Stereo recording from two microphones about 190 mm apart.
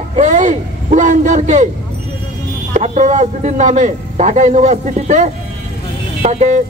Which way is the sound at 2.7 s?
35° right (ahead or behind).